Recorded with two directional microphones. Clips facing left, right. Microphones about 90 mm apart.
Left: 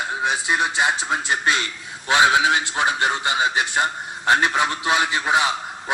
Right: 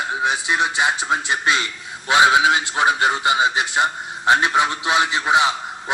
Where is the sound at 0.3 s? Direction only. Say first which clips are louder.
Right 1 dB; centre (ahead or behind).